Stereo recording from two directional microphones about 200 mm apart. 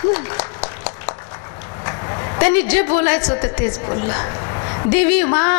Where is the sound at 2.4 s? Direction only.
15° left (ahead or behind).